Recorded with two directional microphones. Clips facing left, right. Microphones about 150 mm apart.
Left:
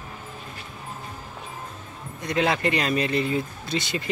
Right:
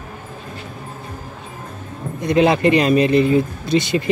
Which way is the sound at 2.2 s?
20° right (ahead or behind).